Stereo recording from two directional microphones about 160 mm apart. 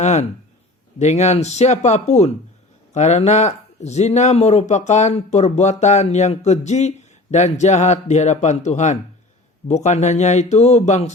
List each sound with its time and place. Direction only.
0.0 s speech: 45° left (ahead or behind)